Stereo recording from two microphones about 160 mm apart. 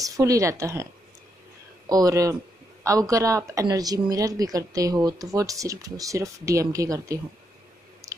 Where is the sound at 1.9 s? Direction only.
20° right (ahead or behind).